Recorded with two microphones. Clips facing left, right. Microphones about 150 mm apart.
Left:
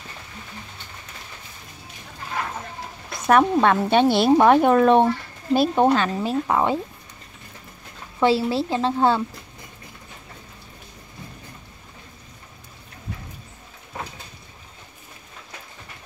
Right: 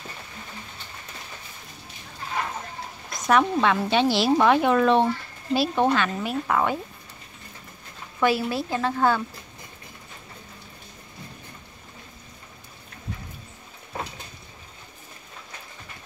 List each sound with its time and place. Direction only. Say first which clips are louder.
3.3 s speech: left 4 dB; 50° left (ahead or behind)
5.9 s speech: left 4 dB; 35° left (ahead or behind)
8.2 s speech: left 4 dB; 25° left (ahead or behind)